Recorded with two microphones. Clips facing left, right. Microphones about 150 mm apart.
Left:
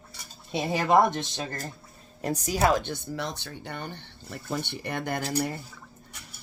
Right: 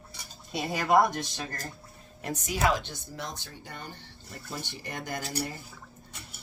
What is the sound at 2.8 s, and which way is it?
Speech, 65° left (ahead or behind).